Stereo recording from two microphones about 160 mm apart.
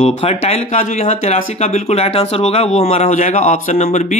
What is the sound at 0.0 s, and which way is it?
Speech, 40° left (ahead or behind).